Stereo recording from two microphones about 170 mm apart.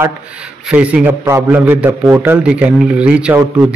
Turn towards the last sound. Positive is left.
turn(degrees=-5)  # may be behind; listen again after turning